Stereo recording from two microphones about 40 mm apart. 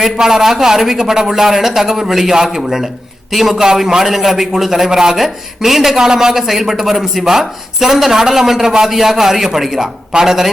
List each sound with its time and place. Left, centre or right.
0.0 s a man's voice: centre
5.1 s a man's voice: centre